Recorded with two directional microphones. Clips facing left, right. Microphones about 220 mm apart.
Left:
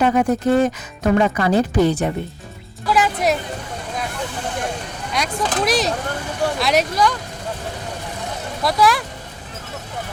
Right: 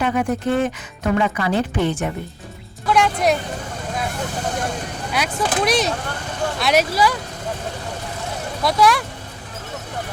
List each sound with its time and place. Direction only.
0.0 s speech: 35° left (ahead or behind)
2.8 s speech: centre (ahead or behind)
5.1 s speech: centre (ahead or behind)
8.6 s speech: centre (ahead or behind)